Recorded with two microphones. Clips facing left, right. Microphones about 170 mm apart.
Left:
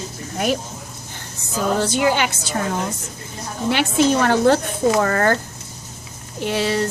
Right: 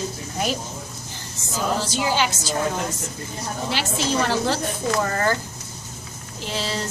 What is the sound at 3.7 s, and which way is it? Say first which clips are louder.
Speech: left 7 dB; 55° left (ahead or behind).